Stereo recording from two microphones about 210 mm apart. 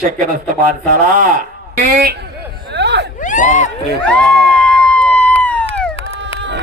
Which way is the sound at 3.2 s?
35° left (ahead or behind).